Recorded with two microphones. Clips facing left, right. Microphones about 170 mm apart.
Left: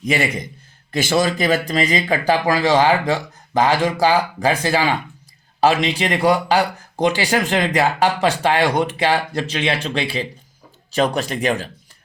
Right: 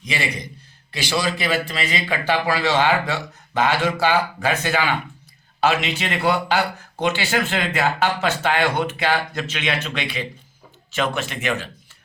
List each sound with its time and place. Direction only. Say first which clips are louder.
0.0 s a man's voice: left 6 dB; 50° left (ahead or behind)